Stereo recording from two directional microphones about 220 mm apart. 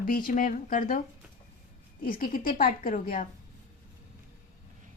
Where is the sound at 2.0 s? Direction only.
40° left (ahead or behind).